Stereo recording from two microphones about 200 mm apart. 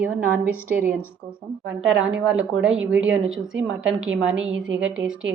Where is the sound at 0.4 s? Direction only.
10° right (ahead or behind).